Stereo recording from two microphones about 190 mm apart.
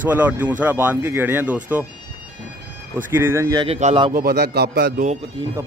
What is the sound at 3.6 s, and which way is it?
Speech, 30° right (ahead or behind).